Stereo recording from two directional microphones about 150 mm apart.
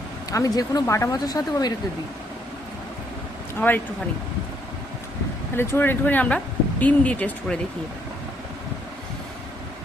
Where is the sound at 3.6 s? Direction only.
10° left (ahead or behind).